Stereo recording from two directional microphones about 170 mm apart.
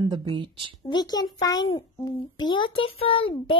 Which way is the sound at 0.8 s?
25° left (ahead or behind).